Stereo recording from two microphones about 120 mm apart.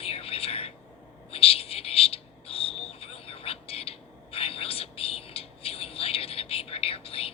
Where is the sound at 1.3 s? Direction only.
55° left (ahead or behind).